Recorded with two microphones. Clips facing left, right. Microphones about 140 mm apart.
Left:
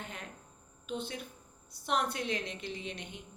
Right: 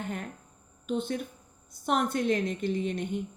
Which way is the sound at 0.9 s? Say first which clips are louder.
Right 8 dB; 50° right (ahead or behind).